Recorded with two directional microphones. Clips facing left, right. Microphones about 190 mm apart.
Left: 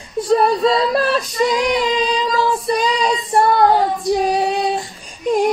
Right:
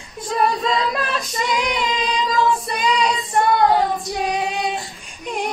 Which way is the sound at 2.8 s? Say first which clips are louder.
Left 2 dB; 35° left (ahead or behind).